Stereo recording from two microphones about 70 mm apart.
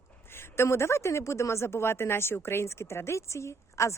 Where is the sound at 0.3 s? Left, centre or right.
Left.